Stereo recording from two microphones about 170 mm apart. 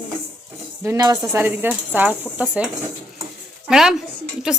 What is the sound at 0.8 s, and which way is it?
A woman's voice, 20° right (ahead or behind).